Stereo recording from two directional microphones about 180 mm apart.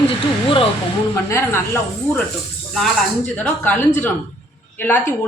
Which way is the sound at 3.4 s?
10° left (ahead or behind).